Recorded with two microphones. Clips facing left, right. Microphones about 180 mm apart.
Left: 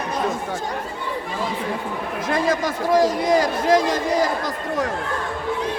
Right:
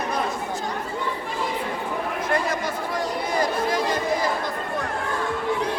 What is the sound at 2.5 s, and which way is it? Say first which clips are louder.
A man's voice: left 7 dB; 90° left.